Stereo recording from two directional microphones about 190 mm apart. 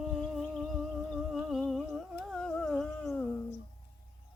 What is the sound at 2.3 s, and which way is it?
Humming, 5° left (ahead or behind).